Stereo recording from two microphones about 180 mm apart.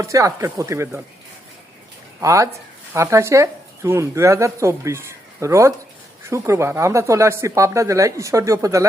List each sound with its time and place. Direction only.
0.0 s speech: 15° right (ahead or behind)
2.2 s speech: 15° right (ahead or behind)